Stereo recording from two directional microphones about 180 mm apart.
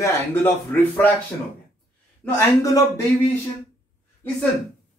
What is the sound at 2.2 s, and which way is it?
Speech, 15° left (ahead or behind).